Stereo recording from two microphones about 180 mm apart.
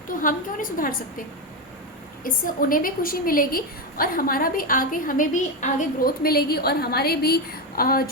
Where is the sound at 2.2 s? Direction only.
50° left (ahead or behind).